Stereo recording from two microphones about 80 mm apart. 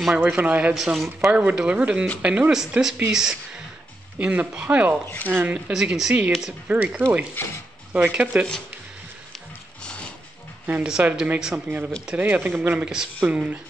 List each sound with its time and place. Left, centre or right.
0.1 s speech: centre
0.7 s speech: centre
5.7 s speech: centre
7.4 s mechanisms: left
7.9 s speech: centre
10.7 s speech: centre
12.8 s speech: centre